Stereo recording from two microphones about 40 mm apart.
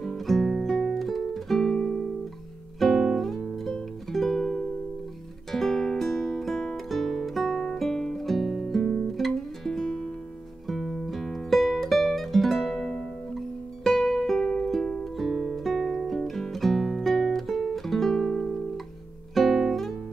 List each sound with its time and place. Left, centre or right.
0.0 s music: centre
0.9 s music: centre
1.6 s music: centre
2.8 s music: centre
6.9 s guitar: centre
10.7 s music: centre
15.1 s music: centre
19.3 s guitar: centre